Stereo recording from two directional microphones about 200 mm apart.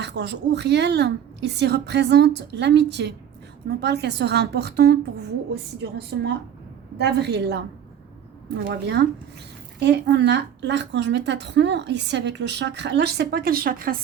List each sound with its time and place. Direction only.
0.0 s a woman's voice: 60° right (ahead or behind)